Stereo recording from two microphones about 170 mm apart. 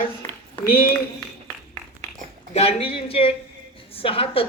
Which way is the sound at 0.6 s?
65° left (ahead or behind).